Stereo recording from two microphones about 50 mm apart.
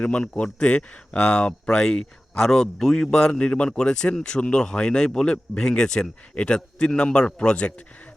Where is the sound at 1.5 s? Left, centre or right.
Centre.